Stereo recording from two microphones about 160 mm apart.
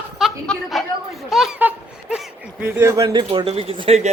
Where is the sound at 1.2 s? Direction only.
5° right (ahead or behind).